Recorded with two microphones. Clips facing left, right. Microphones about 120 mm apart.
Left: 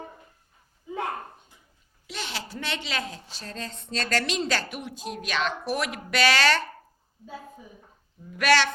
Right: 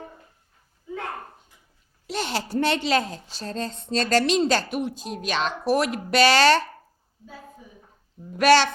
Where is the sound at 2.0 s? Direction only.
40° right (ahead or behind).